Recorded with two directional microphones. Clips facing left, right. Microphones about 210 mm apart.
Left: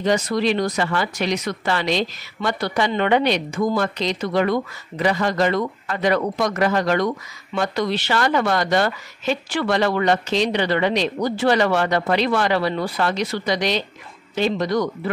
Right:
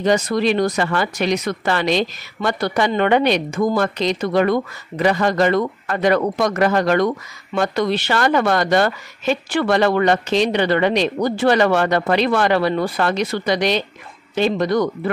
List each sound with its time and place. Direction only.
0.0 s a woman's voice: 50° right (ahead or behind)